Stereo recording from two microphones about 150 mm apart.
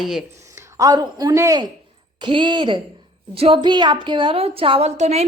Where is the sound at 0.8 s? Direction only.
25° right (ahead or behind).